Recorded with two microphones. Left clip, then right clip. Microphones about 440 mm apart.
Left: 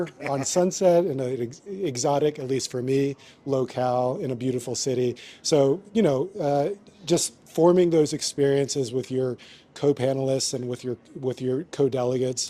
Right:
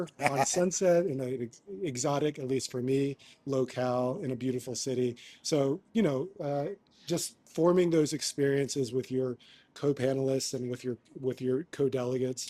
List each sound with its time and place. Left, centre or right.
0.0 s speech: right
0.4 s speech: left